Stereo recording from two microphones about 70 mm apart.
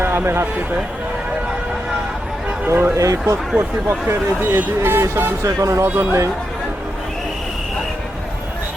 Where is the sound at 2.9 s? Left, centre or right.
Right.